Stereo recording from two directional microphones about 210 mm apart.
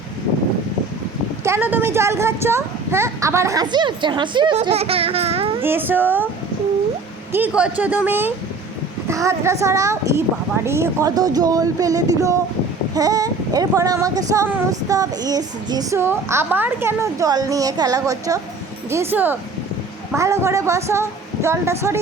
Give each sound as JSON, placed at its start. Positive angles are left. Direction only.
{"t": 1.5, "sound": "speech", "side_deg": -10}
{"t": 5.6, "sound": "speech", "side_deg": -10}
{"t": 7.3, "sound": "speech", "side_deg": -5}